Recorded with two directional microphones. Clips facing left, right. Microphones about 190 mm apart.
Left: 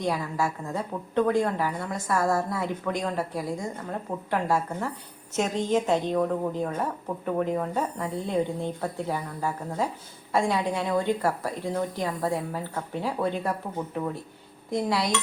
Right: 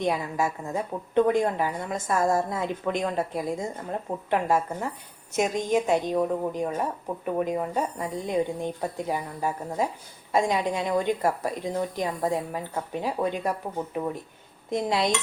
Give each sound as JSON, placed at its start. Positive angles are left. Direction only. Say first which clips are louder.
{"t": 0.0, "sound": "a woman's voice", "louder": "right 1 dB", "side_deg": -20}